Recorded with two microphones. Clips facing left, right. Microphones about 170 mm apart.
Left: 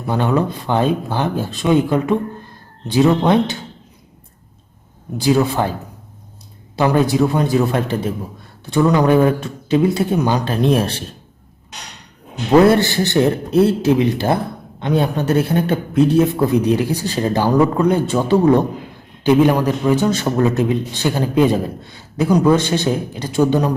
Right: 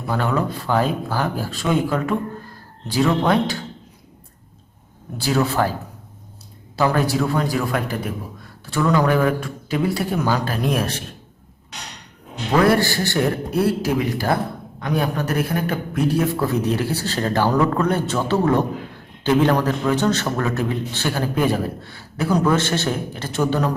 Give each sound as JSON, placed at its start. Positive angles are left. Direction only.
{"t": 0.1, "sound": "a man's voice", "side_deg": 20}
{"t": 5.1, "sound": "a man's voice", "side_deg": 20}
{"t": 6.7, "sound": "a man's voice", "side_deg": 20}
{"t": 12.5, "sound": "a man's voice", "side_deg": 25}